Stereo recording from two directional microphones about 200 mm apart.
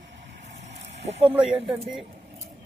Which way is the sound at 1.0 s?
30° right (ahead or behind).